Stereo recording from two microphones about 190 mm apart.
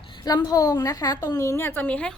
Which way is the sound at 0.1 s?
20° left (ahead or behind).